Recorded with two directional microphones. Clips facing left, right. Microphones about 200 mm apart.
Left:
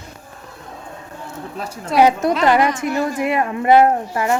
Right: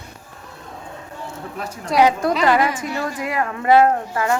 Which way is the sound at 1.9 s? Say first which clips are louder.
Left 2 dB; 25° left (ahead or behind).